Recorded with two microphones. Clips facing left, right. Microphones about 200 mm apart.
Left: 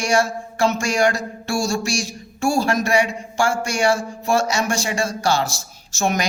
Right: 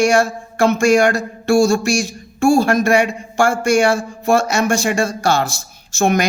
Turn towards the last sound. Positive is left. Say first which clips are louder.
# right 6 dB
turn(degrees=-55)  # may be behind; listen again after turning